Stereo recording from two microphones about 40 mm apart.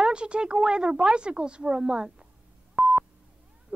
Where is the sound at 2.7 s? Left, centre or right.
Centre.